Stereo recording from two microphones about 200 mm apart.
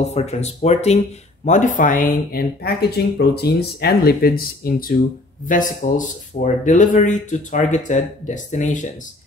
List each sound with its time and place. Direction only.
0.0 s speech: 35° left (ahead or behind)